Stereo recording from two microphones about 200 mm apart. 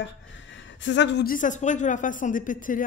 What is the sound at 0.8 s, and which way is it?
Speech, 60° left (ahead or behind).